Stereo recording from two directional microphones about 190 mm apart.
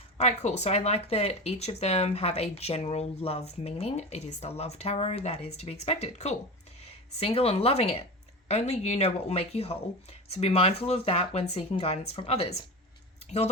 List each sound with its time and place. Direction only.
0.2 s speech: 35° left (ahead or behind)